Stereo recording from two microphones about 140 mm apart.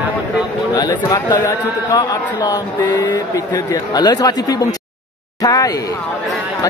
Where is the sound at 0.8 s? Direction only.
30° left (ahead or behind).